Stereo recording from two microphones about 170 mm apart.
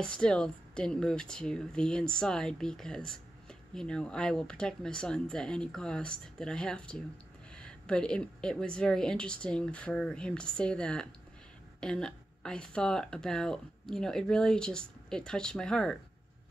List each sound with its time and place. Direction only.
0.0 s a woman's voice: 5° left (ahead or behind)